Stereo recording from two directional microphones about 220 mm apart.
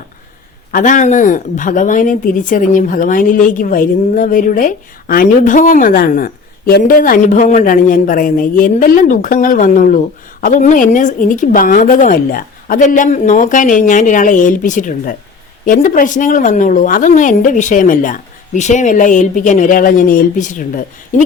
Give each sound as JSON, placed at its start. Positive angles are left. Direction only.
{"t": 0.7, "sound": "speech", "side_deg": 35}